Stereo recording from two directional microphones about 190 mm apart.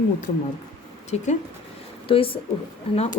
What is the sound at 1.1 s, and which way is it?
A woman's voice, 40° left (ahead or behind).